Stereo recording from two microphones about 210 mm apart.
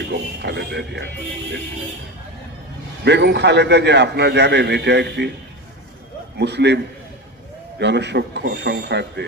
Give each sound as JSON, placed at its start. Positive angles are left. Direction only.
{"t": 0.4, "sound": "a man's voice", "side_deg": -50}
{"t": 3.0, "sound": "a man's voice", "side_deg": -55}
{"t": 6.4, "sound": "a man's voice", "side_deg": -55}
{"t": 7.8, "sound": "a man's voice", "side_deg": -55}